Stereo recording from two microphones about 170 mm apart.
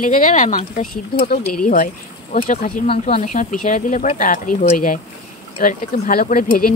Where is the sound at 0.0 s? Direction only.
50° left (ahead or behind).